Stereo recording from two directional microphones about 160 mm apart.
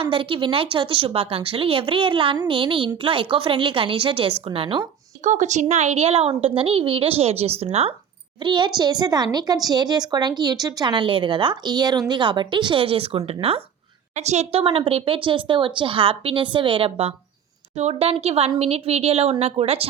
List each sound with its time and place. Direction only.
0.0 s a woman's voice: 35° right (ahead or behind)
5.2 s a woman's voice: 50° right (ahead or behind)